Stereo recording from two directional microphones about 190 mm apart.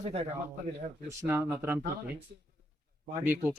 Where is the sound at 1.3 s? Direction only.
10° right (ahead or behind).